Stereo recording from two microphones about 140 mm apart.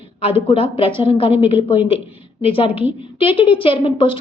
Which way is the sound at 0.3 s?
40° left (ahead or behind).